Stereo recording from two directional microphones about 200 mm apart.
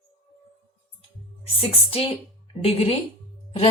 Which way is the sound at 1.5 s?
30° left (ahead or behind).